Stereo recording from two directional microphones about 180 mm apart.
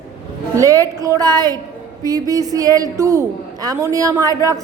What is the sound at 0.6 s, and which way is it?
A man's voice, 20° right (ahead or behind).